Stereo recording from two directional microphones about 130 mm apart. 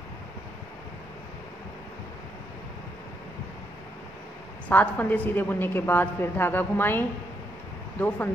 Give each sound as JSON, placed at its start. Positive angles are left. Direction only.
{"t": 4.6, "sound": "a woman's voice", "side_deg": 15}